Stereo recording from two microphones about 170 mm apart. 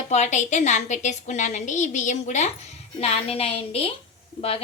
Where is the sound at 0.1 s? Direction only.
45° left (ahead or behind).